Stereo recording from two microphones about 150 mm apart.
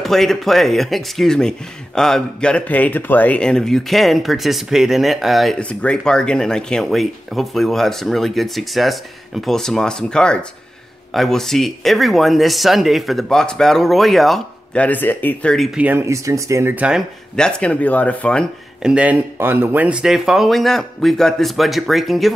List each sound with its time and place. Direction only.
0.0 s speech: centre (ahead or behind)
15.8 s speech: 15° right (ahead or behind)
17.4 s speech: 5° left (ahead or behind)
18.8 s speech: 5° right (ahead or behind)